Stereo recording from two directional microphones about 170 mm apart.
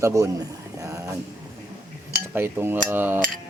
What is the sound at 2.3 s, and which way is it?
Speech, 15° right (ahead or behind).